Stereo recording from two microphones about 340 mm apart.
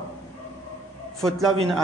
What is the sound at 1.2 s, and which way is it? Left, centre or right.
Speech, centre.